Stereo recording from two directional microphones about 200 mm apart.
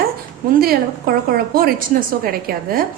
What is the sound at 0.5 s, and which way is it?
A woman's voice, 50° right (ahead or behind).